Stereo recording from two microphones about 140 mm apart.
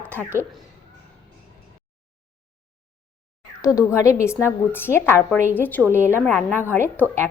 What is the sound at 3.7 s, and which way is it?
A woman's voice, 20° left (ahead or behind).